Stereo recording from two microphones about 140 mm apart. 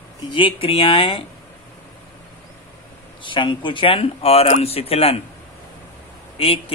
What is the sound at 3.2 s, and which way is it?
Speech, 35° left (ahead or behind).